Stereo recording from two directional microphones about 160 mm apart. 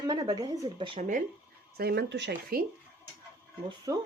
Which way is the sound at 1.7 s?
75° right (ahead or behind).